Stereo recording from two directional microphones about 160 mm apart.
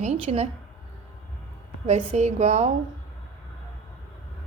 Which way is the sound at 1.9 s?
45° right (ahead or behind).